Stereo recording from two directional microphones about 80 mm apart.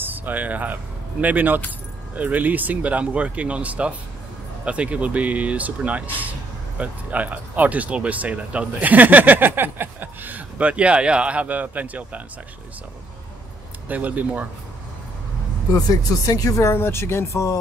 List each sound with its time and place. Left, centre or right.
0.0 s speech: right
13.8 s speech: centre
15.7 s speech: left